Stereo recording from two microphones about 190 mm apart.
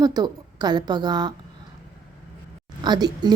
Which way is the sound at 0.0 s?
20° right (ahead or behind).